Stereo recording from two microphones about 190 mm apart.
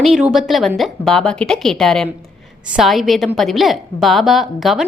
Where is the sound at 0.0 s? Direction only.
5° right (ahead or behind).